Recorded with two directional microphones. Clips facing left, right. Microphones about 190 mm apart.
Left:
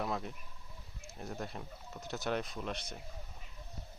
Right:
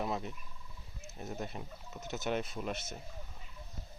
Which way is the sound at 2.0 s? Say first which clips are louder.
Right 1 dB; 20° right (ahead or behind).